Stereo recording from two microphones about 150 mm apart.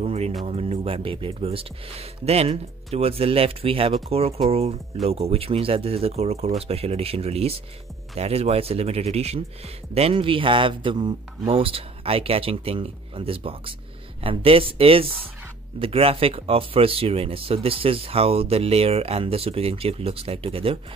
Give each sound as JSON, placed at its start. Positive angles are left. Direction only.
{"t": 0.0, "sound": "music", "side_deg": -45}
{"t": 0.5, "sound": "speech", "side_deg": -40}